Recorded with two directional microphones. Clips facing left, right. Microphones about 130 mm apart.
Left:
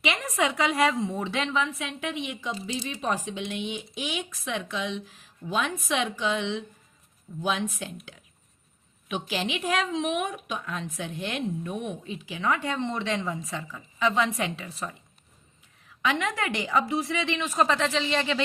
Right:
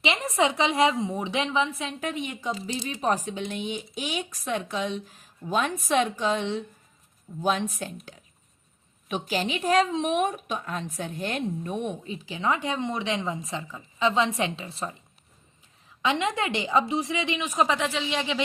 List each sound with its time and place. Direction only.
0.0 s a woman's voice: 30° right (ahead or behind)
2.0 s a woman's voice: 40° right (ahead or behind)
9.0 s a woman's voice: 40° right (ahead or behind)
16.0 s a woman's voice: 25° right (ahead or behind)